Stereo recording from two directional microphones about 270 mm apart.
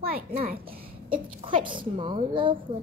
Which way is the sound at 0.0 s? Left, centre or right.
Right.